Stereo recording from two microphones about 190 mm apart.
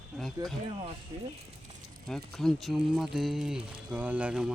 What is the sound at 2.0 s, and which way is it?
Speech, centre (ahead or behind).